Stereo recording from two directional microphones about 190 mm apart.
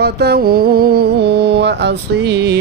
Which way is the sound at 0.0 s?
55° right (ahead or behind).